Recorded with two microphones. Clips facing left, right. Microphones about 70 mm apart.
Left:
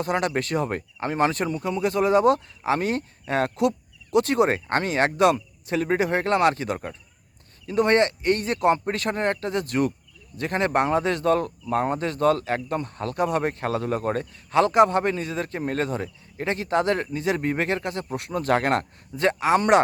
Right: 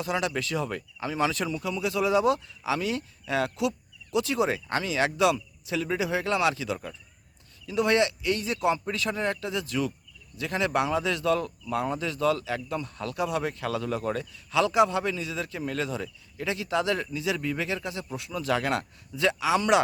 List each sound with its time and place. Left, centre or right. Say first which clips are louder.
0.0 s speech: left 4 dB; left